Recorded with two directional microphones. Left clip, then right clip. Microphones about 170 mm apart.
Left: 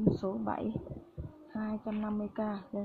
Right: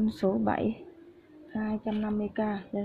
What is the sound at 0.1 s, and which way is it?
Speech, 20° right (ahead or behind).